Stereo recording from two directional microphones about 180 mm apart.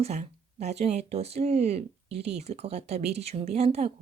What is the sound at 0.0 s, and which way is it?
Speech, 40° right (ahead or behind).